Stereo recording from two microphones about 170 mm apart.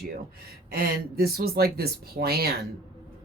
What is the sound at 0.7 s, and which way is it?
Speech, 65° right (ahead or behind).